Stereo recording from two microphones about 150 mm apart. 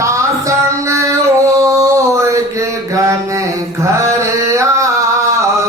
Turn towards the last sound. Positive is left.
turn(degrees=-20)  # may be behind; listen again after turning